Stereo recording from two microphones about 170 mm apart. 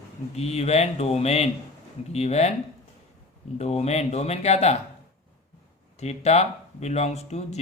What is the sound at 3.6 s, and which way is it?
Speech, 40° left (ahead or behind).